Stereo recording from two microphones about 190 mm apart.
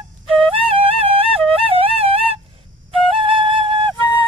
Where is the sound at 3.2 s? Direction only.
25° right (ahead or behind).